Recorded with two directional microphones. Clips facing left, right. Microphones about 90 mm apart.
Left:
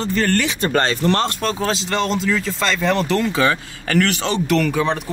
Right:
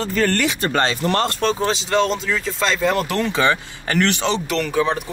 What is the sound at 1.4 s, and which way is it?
Speech, centre (ahead or behind).